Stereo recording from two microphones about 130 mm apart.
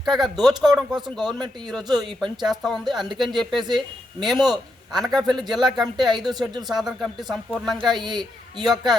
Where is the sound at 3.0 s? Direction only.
35° right (ahead or behind).